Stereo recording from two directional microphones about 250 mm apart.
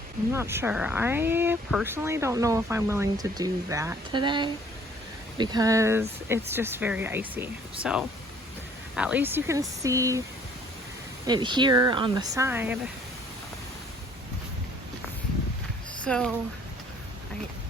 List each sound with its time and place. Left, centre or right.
0.3 s speech: centre
11.3 s speech: centre
16.0 s speech: centre